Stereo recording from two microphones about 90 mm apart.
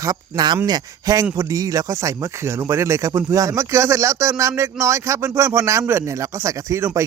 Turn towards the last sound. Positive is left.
turn(degrees=-35)  # may be behind; listen again after turning